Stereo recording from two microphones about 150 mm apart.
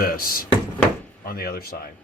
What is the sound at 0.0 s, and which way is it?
Speech, 75° left (ahead or behind).